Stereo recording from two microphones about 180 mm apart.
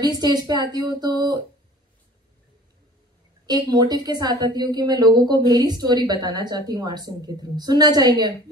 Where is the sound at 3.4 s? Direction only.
25° right (ahead or behind).